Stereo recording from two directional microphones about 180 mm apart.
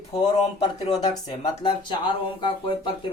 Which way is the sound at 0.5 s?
40° left (ahead or behind).